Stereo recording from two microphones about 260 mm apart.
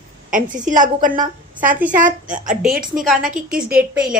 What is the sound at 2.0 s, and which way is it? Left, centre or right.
Speech, right.